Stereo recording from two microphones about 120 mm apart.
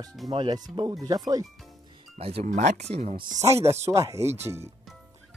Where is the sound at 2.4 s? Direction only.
85° right; by 3.2 s 65° right (ahead or behind).